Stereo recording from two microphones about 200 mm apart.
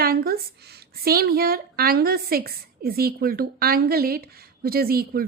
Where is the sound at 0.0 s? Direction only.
50° right (ahead or behind).